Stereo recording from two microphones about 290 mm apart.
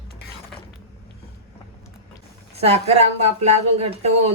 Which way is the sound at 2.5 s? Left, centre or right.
Right.